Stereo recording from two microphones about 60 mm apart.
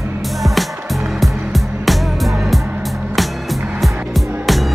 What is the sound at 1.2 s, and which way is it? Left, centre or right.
Music, centre.